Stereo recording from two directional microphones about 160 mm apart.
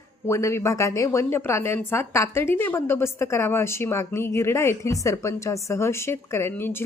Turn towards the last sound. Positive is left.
turn(degrees=15)  # may be behind; listen again after turning